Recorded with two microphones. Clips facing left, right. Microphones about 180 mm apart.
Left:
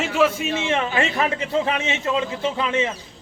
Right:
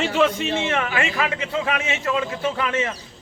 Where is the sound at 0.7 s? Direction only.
20° left (ahead or behind).